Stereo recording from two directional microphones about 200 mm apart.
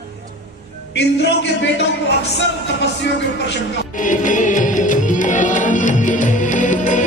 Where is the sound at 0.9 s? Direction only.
60° left (ahead or behind).